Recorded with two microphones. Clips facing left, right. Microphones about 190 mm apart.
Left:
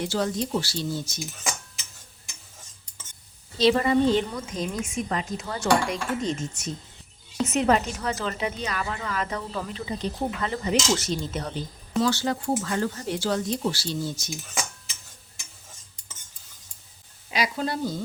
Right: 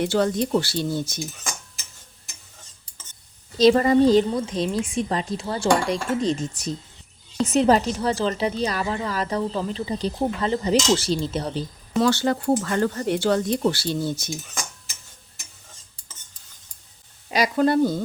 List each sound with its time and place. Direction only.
0.0 s speech: 60° right (ahead or behind)
3.6 s a woman's voice: 40° right (ahead or behind)
11.9 s speech: 60° right (ahead or behind)
17.3 s speech: 50° right (ahead or behind)